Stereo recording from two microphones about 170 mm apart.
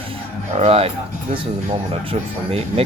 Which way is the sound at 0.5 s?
35° right (ahead or behind).